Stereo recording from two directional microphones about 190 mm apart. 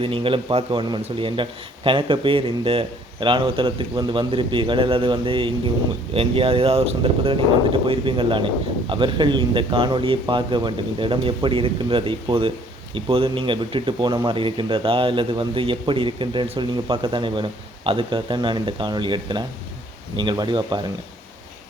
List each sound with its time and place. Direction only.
0.0 s speech: 30° right (ahead or behind)